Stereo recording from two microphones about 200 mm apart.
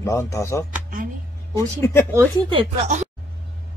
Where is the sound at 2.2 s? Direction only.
25° right (ahead or behind).